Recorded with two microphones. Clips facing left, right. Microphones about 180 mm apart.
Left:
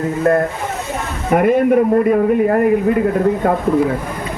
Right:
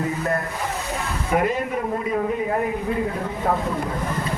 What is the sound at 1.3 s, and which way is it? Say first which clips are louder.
A man's voice: left 10 dB; 55° left (ahead or behind).